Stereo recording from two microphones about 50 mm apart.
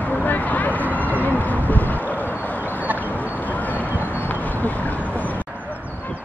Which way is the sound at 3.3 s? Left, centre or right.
Left.